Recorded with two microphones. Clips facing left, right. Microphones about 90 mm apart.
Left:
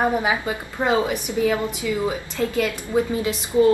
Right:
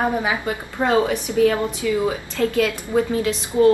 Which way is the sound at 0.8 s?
5° left (ahead or behind).